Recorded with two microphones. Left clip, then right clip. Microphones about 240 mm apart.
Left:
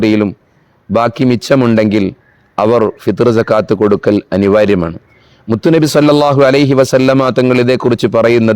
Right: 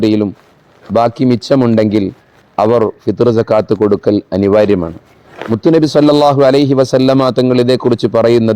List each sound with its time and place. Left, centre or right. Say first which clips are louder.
0.0 s a man's voice: left 1 dB; left